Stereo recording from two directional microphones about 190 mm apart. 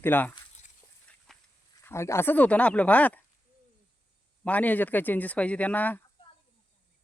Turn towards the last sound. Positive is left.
turn(degrees=10)  # may be behind; listen again after turning